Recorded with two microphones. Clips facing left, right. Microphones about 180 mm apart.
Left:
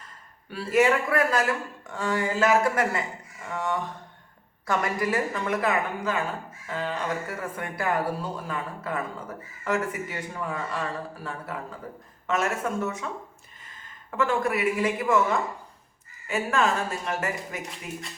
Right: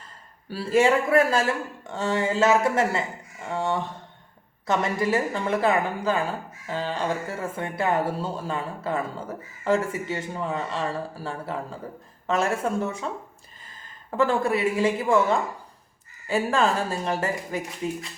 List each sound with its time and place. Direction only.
0.5 s speech: 30° right (ahead or behind)
14.1 s speech: 35° right (ahead or behind)